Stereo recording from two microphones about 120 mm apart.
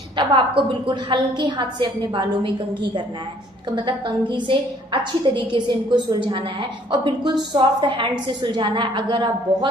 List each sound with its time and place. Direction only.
0.2 s a woman's voice: 45° right (ahead or behind)